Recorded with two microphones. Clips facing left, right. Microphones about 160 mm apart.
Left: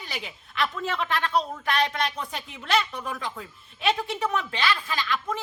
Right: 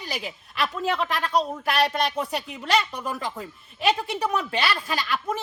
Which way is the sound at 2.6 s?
Centre (ahead or behind).